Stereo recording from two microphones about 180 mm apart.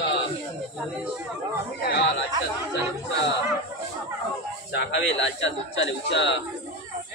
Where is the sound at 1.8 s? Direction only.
60° left (ahead or behind).